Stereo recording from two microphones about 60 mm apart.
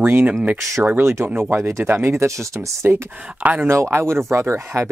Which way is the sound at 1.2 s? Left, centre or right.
Right.